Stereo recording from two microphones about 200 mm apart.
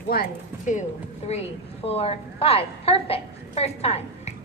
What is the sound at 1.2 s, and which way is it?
A woman's voice, 30° left (ahead or behind).